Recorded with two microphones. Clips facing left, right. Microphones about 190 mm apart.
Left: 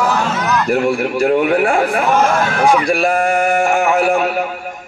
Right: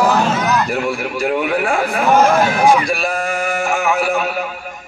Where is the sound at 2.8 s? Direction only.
55° left (ahead or behind).